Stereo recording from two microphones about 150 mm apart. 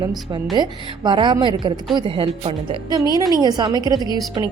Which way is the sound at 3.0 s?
25° left (ahead or behind).